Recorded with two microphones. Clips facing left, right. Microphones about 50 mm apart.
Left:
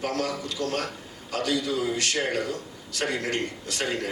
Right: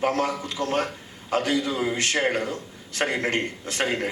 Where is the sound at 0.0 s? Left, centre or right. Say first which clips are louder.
Right 4 dB; right.